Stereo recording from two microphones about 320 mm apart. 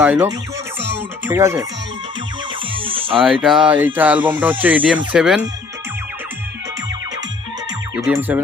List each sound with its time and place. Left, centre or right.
0.0 s speech: centre
2.8 s music: centre
3.2 s speech: centre
8.0 s speech: centre